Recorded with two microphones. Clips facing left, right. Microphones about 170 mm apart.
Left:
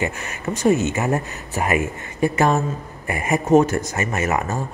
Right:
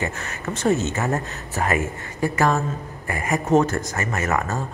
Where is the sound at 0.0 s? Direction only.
15° left (ahead or behind).